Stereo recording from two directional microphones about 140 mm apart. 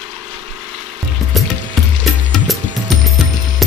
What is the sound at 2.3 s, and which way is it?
Music, centre (ahead or behind).